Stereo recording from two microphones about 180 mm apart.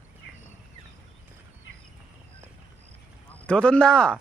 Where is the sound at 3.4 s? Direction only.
5° left (ahead or behind).